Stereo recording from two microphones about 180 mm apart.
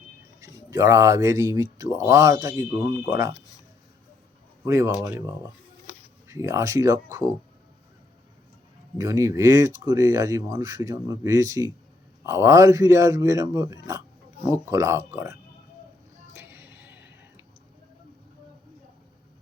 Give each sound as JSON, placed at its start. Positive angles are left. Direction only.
{"t": 0.3, "sound": "speech", "side_deg": -20}
{"t": 4.6, "sound": "speech", "side_deg": -15}
{"t": 9.0, "sound": "speech", "side_deg": -15}
{"t": 16.3, "sound": "a sound", "side_deg": -15}